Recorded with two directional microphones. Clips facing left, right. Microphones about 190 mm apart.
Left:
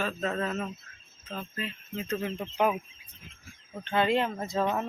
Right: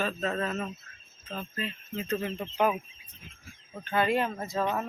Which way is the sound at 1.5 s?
5° left (ahead or behind).